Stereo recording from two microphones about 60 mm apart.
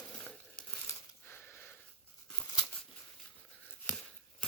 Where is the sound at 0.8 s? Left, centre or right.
Left.